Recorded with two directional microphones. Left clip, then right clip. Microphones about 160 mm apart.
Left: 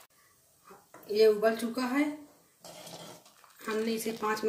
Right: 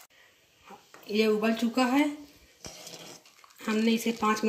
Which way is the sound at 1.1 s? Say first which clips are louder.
Left 2 dB; 55° right (ahead or behind).